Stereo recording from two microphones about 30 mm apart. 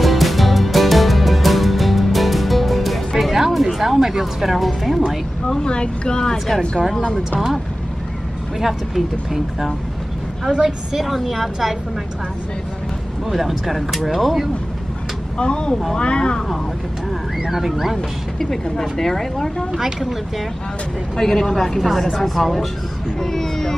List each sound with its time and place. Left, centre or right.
0.0 s music: centre
3.6 s a sound: centre
4.4 s speech: centre
5.6 s speech: left
6.3 s speech: centre
8.5 s speech: centre
10.5 s a woman's voice: right
11.0 s speech: centre
13.3 s speech: centre
15.3 s speech: left
17.5 s speech: centre
18.4 s speech: centre
21.2 s speech: centre